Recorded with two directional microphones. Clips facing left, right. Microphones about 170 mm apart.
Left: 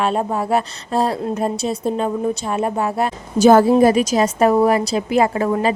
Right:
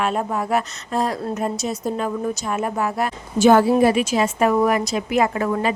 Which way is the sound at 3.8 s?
40° left (ahead or behind).